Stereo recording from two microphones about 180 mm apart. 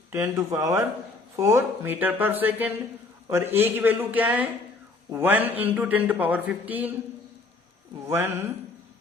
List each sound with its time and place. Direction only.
0.1 s speech: 15° right (ahead or behind)
8.0 s speech: 10° right (ahead or behind)